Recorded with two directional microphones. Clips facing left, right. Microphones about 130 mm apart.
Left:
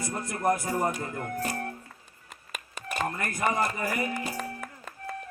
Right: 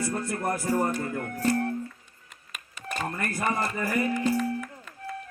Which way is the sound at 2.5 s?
45° left (ahead or behind).